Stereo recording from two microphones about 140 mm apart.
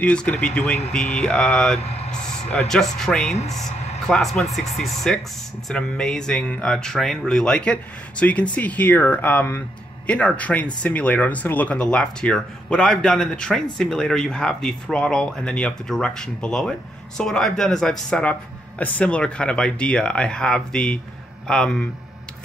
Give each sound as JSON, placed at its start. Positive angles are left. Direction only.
{"t": 0.0, "sound": "speech", "side_deg": 10}
{"t": 1.8, "sound": "speech", "side_deg": 45}
{"t": 2.5, "sound": "speech", "side_deg": 5}
{"t": 3.3, "sound": "speech", "side_deg": 50}
{"t": 4.1, "sound": "speech", "side_deg": 0}